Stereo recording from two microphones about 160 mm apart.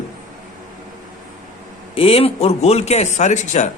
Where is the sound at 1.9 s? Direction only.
35° left (ahead or behind).